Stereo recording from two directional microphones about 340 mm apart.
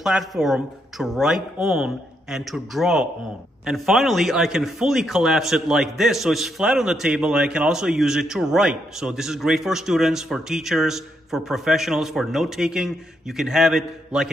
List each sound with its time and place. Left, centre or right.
0.0 s a man's voice: centre